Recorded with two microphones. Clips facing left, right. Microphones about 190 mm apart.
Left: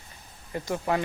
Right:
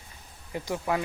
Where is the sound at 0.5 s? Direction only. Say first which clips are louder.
Left 1 dB; 15° right (ahead or behind).